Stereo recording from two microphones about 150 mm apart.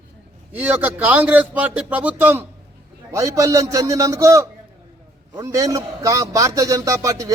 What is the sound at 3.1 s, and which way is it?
A man's voice, 20° right (ahead or behind).